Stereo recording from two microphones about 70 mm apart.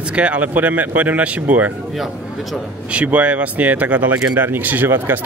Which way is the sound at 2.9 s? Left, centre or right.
Centre.